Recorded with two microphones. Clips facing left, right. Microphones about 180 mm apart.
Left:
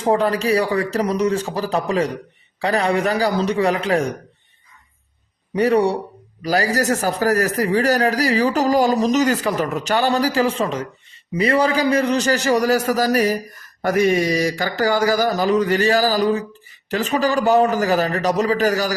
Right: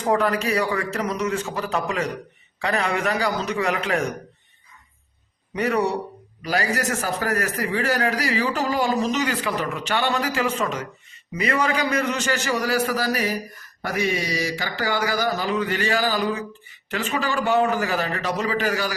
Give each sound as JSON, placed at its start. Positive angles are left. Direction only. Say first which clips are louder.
{"t": 0.0, "sound": "a man's voice", "louder": "left 3 dB", "side_deg": 30}
{"t": 5.5, "sound": "a man's voice", "louder": "left 6 dB", "side_deg": 30}